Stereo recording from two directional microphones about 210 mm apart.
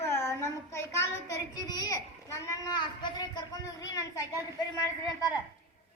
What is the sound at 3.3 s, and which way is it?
Speech, 20° left (ahead or behind).